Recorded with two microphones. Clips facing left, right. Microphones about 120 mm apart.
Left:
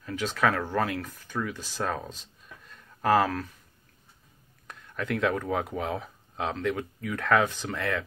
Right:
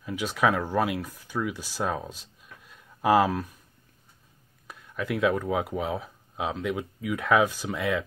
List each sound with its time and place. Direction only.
0.0 s speech: 10° right (ahead or behind)
2.6 s a sound: 10° right (ahead or behind)
4.6 s speech: 5° right (ahead or behind)